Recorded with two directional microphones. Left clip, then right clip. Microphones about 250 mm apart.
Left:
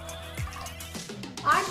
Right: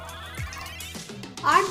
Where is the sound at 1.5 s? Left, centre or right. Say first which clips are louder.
Right 4 dB; right.